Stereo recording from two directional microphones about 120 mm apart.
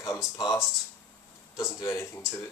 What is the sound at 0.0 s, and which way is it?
Speech, 30° left (ahead or behind).